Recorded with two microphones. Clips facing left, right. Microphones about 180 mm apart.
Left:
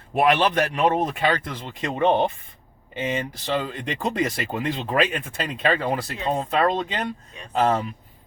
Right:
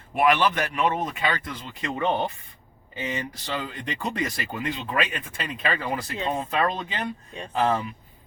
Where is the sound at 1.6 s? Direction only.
25° left (ahead or behind).